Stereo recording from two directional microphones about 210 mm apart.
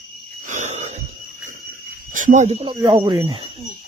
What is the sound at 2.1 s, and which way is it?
Speech, 40° right (ahead or behind).